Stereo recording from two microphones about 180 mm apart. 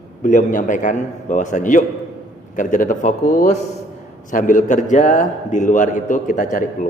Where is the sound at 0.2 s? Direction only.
45° left (ahead or behind).